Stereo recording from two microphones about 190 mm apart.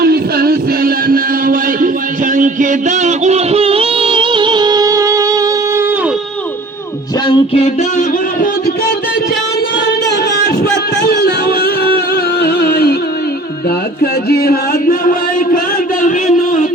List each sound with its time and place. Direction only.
0.0 s music: 55° right (ahead or behind)
2.3 s a sound: 45° right (ahead or behind); by 5.9 s 15° right (ahead or behind)
7.3 s music: 35° left (ahead or behind)
10.1 s music: 55° left (ahead or behind)
13.7 s chant: 55° left (ahead or behind)